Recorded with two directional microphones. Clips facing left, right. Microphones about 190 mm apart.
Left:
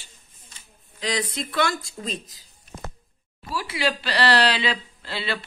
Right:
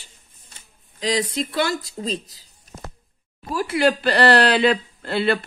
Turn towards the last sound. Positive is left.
turn(degrees=-55)  # may be behind; listen again after turning